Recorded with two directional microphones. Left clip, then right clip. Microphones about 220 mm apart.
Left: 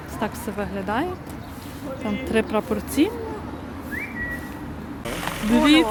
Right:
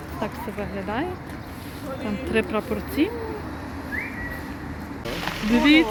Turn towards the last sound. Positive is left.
turn(degrees=5)  # may be behind; listen again after turning